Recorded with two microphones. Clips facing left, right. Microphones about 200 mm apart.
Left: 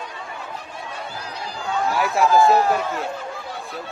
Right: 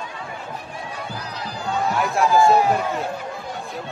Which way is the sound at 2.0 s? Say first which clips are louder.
Left 1 dB; centre (ahead or behind).